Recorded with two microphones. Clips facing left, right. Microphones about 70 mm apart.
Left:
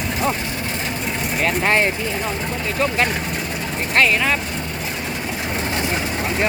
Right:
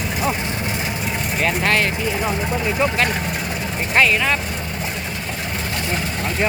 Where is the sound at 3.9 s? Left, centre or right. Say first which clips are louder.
Even; centre.